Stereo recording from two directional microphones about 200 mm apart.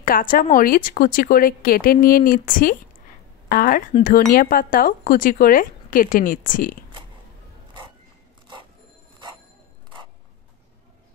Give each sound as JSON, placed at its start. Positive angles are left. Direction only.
{"t": 0.0, "sound": "a woman's voice", "side_deg": 45}